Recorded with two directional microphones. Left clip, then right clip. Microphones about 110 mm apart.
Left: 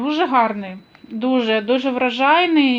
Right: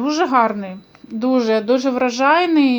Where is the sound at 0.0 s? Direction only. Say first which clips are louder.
Right 1 dB; 20° right (ahead or behind).